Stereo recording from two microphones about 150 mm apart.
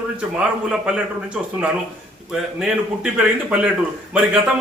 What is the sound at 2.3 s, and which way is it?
A man's voice, 5° right (ahead or behind).